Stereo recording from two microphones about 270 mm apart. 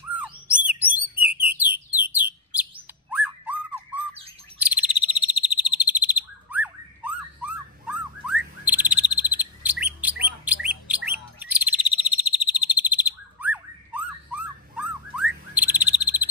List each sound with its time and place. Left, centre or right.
0.1 s bird: centre
4.6 s frog: centre
11.1 s bird: centre